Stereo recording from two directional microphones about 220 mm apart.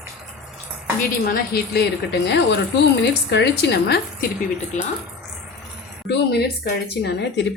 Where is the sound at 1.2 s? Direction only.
45° left (ahead or behind).